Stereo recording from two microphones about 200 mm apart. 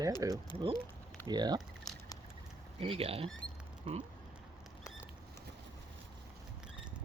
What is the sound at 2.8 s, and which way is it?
Speech, 30° right (ahead or behind).